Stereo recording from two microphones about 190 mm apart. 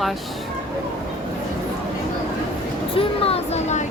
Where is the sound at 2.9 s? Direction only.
30° left (ahead or behind).